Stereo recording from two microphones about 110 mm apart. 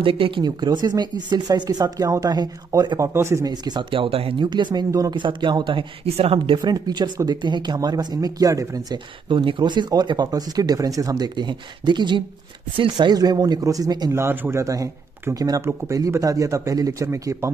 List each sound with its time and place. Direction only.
0.0 s speech: 55° right (ahead or behind); by 3.4 s 25° right (ahead or behind)
3.4 s speech: 40° right (ahead or behind)
3.9 s speech: 55° right (ahead or behind)
6.0 s speech: 65° right (ahead or behind); by 14.1 s 35° right (ahead or behind)
14.1 s speech: 20° right (ahead or behind)